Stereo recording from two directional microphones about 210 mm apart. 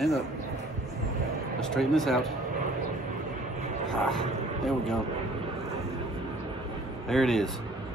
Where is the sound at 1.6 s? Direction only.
Centre (ahead or behind).